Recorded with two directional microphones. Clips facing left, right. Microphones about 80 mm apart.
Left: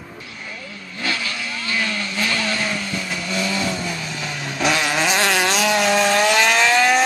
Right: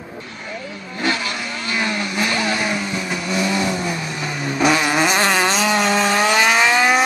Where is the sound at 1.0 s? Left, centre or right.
Right.